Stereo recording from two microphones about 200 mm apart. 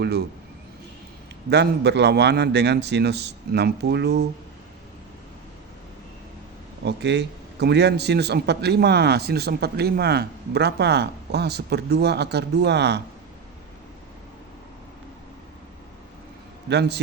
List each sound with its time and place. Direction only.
1.5 s a man's voice: 55° right (ahead or behind)
6.8 s a man's voice: 60° right (ahead or behind)
16.6 s a man's voice: 55° right (ahead or behind)